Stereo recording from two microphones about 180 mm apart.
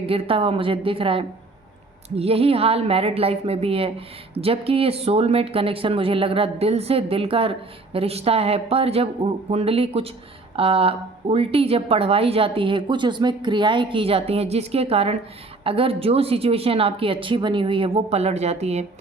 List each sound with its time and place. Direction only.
0.0 s a woman's voice: 30° right (ahead or behind)